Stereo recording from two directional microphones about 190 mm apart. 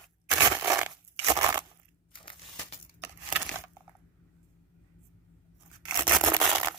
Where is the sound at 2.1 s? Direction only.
25° left (ahead or behind).